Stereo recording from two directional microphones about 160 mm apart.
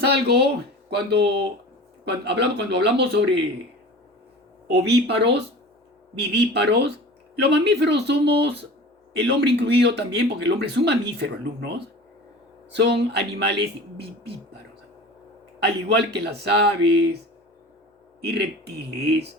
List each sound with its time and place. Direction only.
0.0 s speech: 90° right
4.7 s speech: 90° right
16.1 s speech: 90° right
18.3 s speech: 90° right